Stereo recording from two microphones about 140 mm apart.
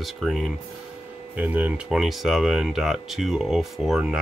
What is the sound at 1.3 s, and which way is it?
Speech, 10° right (ahead or behind).